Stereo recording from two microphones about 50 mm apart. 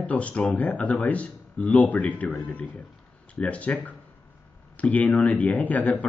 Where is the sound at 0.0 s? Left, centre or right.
Left.